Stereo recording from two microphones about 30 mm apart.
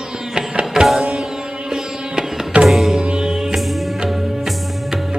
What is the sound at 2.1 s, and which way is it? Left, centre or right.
Music, right.